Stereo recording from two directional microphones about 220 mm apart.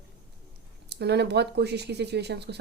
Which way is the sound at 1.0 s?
50° right (ahead or behind).